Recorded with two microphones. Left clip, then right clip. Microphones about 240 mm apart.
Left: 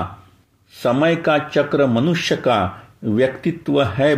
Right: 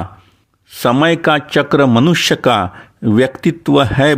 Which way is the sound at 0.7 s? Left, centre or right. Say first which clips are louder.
Right 4 dB; right.